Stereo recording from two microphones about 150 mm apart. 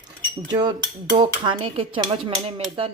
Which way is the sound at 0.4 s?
30° right (ahead or behind).